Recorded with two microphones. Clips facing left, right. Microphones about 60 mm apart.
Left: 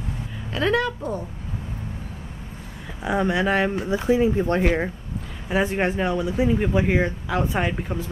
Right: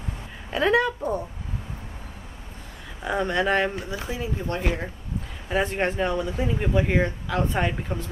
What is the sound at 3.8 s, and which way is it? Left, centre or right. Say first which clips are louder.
Speech: left 11 dB; left.